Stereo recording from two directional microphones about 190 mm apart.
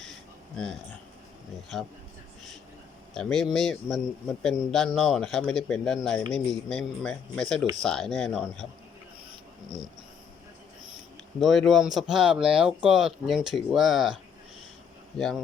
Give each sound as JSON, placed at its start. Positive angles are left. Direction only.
{"t": 0.0, "sound": "a sound", "side_deg": 0}
{"t": 3.2, "sound": "speech", "side_deg": 0}
{"t": 11.3, "sound": "speech", "side_deg": 0}
{"t": 15.2, "sound": "speech", "side_deg": 0}